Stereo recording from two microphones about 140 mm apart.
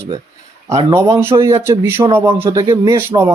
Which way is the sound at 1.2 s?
20° right (ahead or behind).